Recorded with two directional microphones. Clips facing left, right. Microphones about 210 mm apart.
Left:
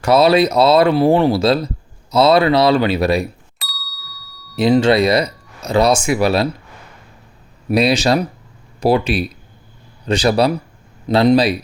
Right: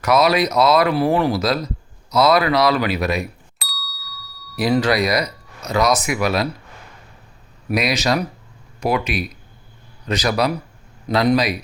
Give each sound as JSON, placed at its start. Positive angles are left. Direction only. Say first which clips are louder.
{"t": 0.0, "sound": "speech", "louder": "left 4 dB", "side_deg": 30}
{"t": 3.6, "sound": "ding", "louder": "right 2 dB", "side_deg": 0}
{"t": 4.5, "sound": "speech", "louder": "left 5 dB", "side_deg": 25}
{"t": 7.7, "sound": "speech", "louder": "left 5 dB", "side_deg": 30}